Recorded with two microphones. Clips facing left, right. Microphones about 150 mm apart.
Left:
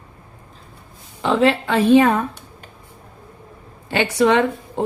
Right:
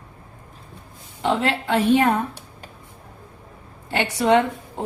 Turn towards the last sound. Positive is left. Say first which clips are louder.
# even
turn(degrees=90)